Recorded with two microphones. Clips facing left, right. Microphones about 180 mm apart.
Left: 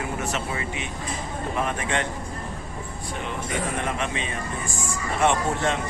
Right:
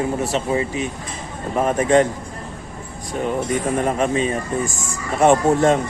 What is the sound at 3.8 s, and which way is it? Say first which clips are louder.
Speech: right 9 dB; 40° right (ahead or behind).